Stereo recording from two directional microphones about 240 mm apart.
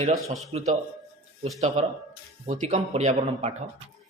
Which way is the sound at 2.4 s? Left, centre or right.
Right.